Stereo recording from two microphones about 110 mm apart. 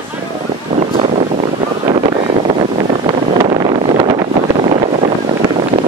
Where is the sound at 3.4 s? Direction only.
50° right (ahead or behind).